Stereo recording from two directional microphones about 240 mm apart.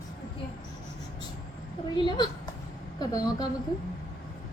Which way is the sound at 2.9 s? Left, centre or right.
Centre.